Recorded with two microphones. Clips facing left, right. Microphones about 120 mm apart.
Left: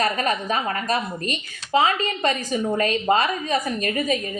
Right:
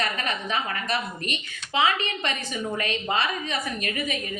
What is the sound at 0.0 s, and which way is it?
A woman's voice, 40° left (ahead or behind).